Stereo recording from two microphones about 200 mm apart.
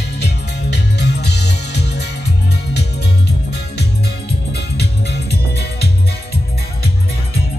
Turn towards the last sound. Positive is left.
turn(degrees=55)  # may be behind; listen again after turning